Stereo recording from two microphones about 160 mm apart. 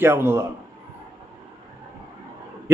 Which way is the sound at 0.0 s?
15° right (ahead or behind).